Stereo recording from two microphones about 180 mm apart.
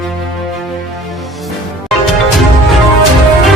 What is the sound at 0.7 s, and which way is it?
Music, centre (ahead or behind).